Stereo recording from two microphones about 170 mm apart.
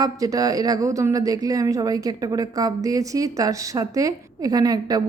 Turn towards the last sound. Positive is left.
turn(degrees=-20)  # may be behind; listen again after turning